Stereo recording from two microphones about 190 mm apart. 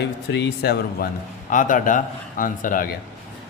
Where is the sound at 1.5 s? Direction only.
45° left (ahead or behind).